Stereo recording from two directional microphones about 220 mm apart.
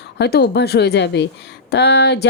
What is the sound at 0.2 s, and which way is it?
Speech, 50° left (ahead or behind).